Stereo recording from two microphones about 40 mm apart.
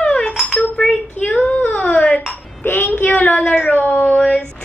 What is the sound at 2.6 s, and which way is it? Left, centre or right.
Speech, left.